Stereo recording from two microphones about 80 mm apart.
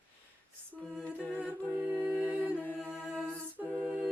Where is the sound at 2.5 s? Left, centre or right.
Centre.